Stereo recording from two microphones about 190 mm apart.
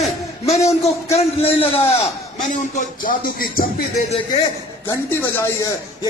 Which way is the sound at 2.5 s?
45° left (ahead or behind).